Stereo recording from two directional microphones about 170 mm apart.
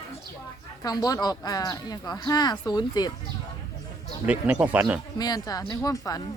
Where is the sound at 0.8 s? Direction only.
20° left (ahead or behind).